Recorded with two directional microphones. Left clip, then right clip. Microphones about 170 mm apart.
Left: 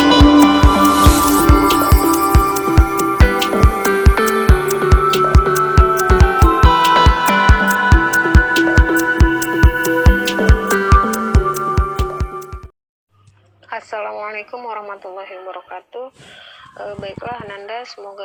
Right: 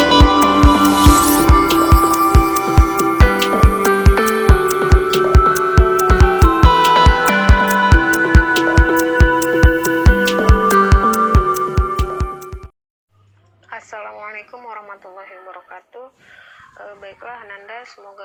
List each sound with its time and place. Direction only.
0.0 s music: centre (ahead or behind)
13.7 s radio: 25° left (ahead or behind)
16.7 s a sound: 30° left (ahead or behind)